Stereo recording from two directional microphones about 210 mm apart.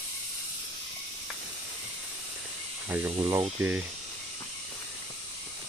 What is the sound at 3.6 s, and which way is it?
Speech, 5° right (ahead or behind).